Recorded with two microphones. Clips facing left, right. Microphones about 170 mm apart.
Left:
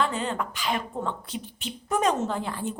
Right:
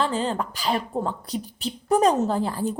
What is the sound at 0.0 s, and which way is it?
Speech, 30° right (ahead or behind).